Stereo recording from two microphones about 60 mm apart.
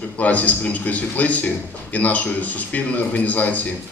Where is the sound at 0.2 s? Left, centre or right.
Left.